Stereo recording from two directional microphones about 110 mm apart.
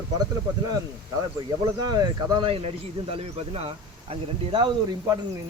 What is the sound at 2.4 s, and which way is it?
Speech, 60° right (ahead or behind).